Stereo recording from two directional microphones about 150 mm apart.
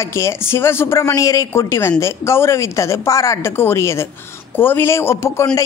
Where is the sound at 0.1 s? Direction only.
15° left (ahead or behind).